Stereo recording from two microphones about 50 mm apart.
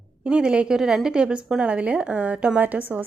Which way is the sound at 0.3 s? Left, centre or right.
Right.